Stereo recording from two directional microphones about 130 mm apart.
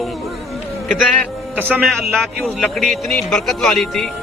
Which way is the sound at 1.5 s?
15° right (ahead or behind).